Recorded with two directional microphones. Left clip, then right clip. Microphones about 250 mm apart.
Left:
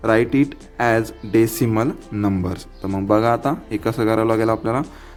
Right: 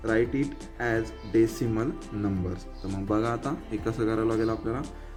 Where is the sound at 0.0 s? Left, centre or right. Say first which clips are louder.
Left 9 dB; left.